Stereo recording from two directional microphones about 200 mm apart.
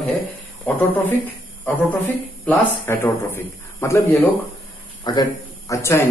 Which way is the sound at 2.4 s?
5° left (ahead or behind).